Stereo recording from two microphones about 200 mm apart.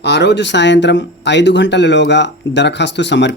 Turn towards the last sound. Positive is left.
turn(degrees=60)  # may be behind; listen again after turning